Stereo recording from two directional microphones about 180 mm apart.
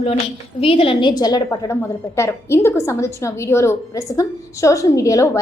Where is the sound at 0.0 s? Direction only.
30° left (ahead or behind).